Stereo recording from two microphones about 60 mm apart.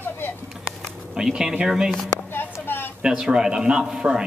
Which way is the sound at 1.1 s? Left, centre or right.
Centre.